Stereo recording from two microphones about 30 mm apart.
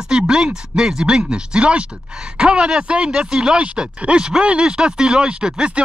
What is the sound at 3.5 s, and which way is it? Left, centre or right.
Speech, right.